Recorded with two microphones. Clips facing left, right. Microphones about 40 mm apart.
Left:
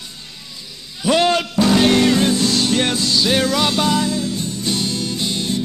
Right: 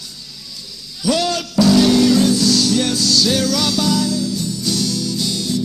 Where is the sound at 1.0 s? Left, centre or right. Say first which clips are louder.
Left 3 dB; left.